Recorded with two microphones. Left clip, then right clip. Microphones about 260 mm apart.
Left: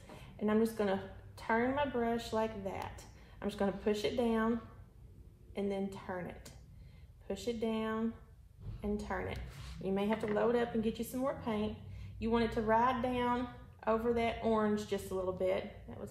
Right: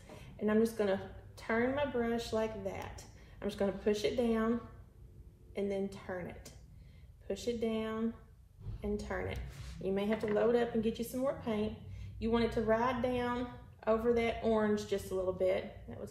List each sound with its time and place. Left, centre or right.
0.4 s a woman's voice: centre
10.0 s speech: centre
10.3 s a woman's voice: centre